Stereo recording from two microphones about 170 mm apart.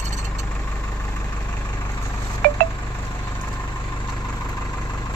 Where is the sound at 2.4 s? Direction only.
70° right (ahead or behind).